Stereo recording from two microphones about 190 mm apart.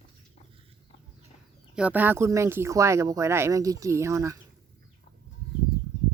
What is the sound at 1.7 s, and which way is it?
Speech, 5° right (ahead or behind).